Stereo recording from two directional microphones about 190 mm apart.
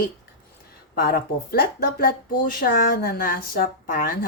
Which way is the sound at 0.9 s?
50° left (ahead or behind).